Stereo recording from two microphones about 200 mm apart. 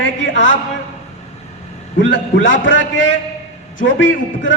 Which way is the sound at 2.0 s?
70° left (ahead or behind).